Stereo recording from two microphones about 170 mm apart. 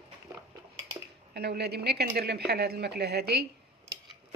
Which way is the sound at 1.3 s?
75° right (ahead or behind).